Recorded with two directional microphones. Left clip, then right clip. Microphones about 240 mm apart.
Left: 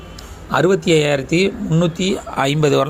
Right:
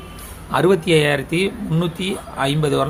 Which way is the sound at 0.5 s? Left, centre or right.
Centre.